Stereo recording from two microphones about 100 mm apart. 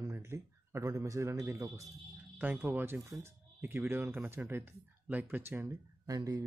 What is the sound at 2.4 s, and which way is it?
Speech, 20° right (ahead or behind).